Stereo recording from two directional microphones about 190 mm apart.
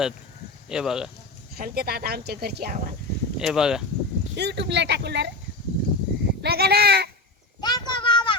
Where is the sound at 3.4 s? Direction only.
5° right (ahead or behind).